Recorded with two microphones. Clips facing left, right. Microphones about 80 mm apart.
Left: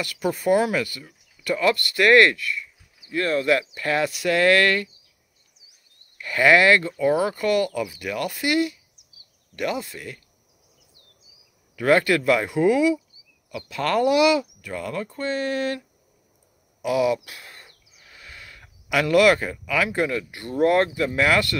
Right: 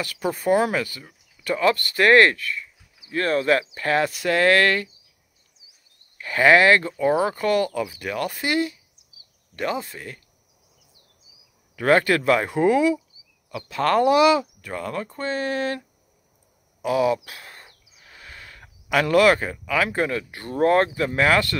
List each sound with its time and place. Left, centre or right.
0.0 s speech: right
6.2 s speech: right
11.7 s speech: right
16.8 s speech: right
17.6 s bird: right
18.1 s speech: right